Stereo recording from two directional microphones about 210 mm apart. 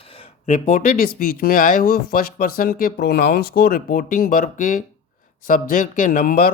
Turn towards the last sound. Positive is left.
turn(degrees=40)  # may be behind; listen again after turning